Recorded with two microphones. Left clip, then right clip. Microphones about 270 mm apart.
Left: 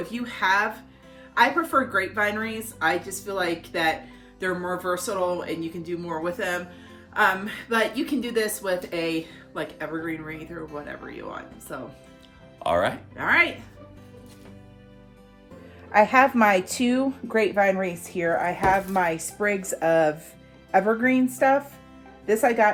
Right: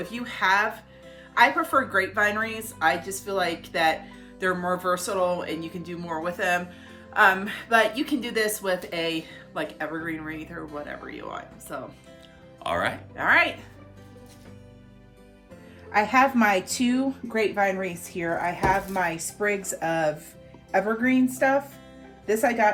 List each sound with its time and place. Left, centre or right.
0.0 s a woman's voice: centre
12.5 s speech: centre
13.1 s a woman's voice: centre
15.9 s speech: left